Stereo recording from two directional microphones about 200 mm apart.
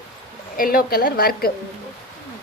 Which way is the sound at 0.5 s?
45° left (ahead or behind).